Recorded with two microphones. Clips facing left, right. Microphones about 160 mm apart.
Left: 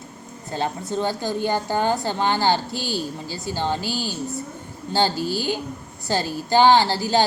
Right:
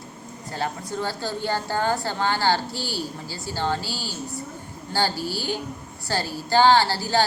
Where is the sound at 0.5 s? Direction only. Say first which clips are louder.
Left 4 dB; 20° left (ahead or behind).